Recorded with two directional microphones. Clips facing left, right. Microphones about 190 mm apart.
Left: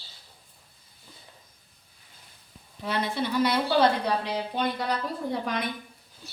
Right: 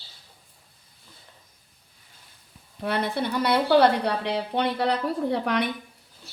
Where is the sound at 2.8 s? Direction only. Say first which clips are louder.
Right 2 dB; 60° right (ahead or behind).